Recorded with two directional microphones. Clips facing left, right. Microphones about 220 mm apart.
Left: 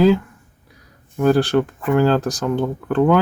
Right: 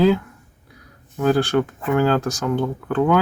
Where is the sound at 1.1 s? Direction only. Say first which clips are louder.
Left 2 dB; 15° left (ahead or behind).